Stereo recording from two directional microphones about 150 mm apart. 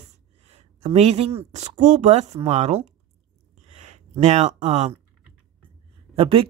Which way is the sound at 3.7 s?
50° right (ahead or behind).